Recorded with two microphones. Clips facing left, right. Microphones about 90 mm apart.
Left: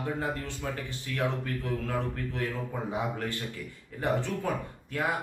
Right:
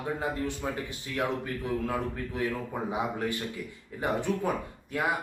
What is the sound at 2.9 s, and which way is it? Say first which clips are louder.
Speech: right 2 dB; 15° right (ahead or behind).